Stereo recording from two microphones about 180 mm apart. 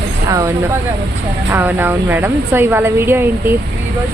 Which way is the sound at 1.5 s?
10° right (ahead or behind).